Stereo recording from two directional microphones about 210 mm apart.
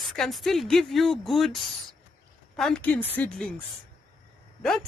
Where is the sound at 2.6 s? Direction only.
5° left (ahead or behind).